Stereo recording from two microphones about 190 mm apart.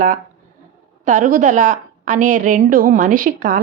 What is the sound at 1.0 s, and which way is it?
A woman's voice, 45° right (ahead or behind).